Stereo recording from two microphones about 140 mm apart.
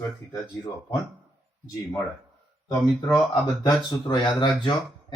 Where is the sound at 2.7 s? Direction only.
20° left (ahead or behind).